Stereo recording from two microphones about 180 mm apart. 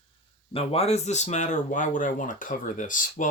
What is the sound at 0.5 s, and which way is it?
Speech, 35° left (ahead or behind).